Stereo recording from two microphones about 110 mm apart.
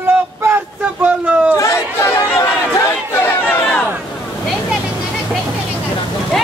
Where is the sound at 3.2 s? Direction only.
20° left (ahead or behind).